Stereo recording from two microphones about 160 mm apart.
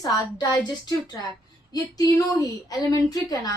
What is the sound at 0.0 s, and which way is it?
A woman's voice, 25° left (ahead or behind).